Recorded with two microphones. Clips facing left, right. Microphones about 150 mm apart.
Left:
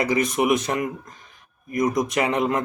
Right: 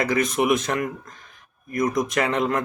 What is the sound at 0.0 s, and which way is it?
A man's voice, 15° left (ahead or behind).